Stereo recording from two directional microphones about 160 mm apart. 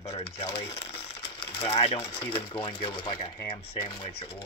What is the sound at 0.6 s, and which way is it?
Crumpling, 40° left (ahead or behind).